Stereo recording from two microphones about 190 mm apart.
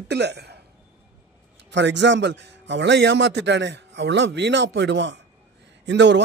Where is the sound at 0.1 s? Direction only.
65° right (ahead or behind).